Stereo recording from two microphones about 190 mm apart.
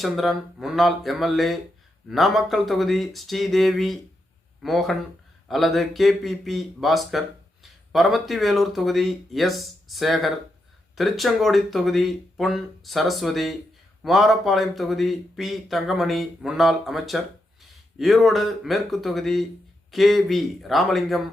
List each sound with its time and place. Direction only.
0.0 s speech: centre (ahead or behind)